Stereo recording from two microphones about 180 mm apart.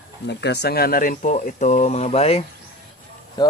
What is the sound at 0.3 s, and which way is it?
Speech, 70° left (ahead or behind).